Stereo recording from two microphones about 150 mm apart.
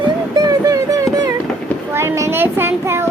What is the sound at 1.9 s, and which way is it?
Child singing, 15° right (ahead or behind).